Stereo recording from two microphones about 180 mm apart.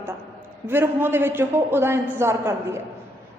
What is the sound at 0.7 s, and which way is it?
A woman's voice, 10° right (ahead or behind).